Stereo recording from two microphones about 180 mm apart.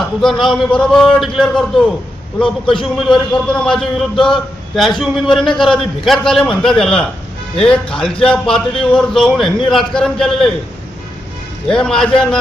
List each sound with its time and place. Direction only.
0.2 s a man's voice: centre (ahead or behind)
2.4 s a man's voice: 30° left (ahead or behind)
3.4 s a man's voice: 5° left (ahead or behind)
11.7 s a man's voice: 5° left (ahead or behind)